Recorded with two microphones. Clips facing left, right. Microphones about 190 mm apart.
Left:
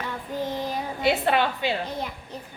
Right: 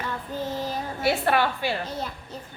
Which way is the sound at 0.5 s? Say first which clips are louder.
Left 1 dB; 15° left (ahead or behind).